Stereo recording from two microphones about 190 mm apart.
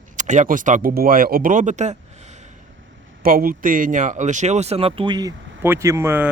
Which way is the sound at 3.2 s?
50° right (ahead or behind).